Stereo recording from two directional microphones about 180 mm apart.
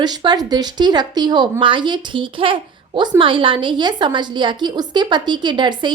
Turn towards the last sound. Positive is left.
turn(degrees=-25)  # may be behind; listen again after turning